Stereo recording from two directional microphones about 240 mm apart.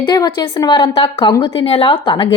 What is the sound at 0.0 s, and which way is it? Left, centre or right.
Speech, centre.